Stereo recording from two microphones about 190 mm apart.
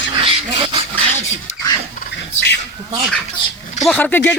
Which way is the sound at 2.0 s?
60° left (ahead or behind).